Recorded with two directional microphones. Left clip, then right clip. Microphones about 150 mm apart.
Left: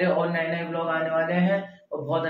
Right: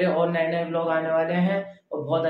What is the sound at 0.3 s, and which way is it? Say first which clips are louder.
Mantra: right 3 dB; 15° right (ahead or behind).